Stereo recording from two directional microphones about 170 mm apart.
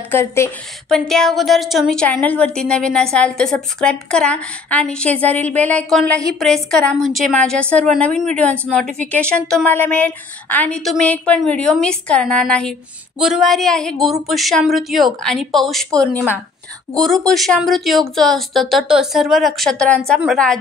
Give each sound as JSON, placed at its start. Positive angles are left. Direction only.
{"t": 0.1, "sound": "speech", "side_deg": 15}
{"t": 0.8, "sound": "a woman's voice", "side_deg": 0}